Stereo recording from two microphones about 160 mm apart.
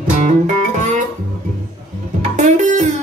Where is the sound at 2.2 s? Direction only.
50° right (ahead or behind).